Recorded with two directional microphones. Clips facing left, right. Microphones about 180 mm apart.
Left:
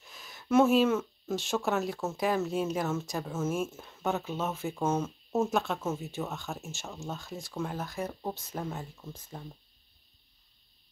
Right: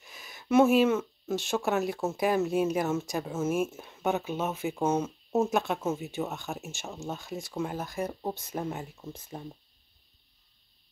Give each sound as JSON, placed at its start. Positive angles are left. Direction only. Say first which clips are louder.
{"t": 0.0, "sound": "speech", "louder": "right 1 dB", "side_deg": -5}
{"t": 7.3, "sound": "speech", "louder": "right 2 dB", "side_deg": 0}